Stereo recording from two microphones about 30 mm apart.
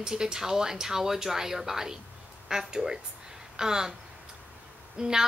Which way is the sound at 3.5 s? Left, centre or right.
Right.